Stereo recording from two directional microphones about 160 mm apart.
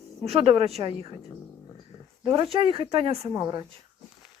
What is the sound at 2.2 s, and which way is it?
Speech, 30° right (ahead or behind).